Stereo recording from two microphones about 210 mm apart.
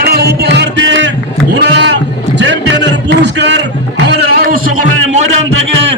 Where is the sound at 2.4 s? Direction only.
55° right (ahead or behind).